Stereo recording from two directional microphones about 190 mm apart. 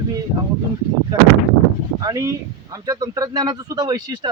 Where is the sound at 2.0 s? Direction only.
15° right (ahead or behind).